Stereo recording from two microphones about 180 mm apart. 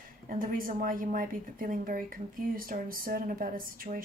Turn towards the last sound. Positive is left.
turn(degrees=-50)  # may be behind; listen again after turning